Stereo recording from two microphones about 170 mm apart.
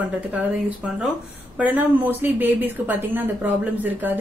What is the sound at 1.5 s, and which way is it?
A woman's voice, 10° right (ahead or behind).